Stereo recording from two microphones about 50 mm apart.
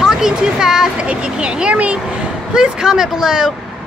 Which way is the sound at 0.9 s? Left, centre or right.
Right.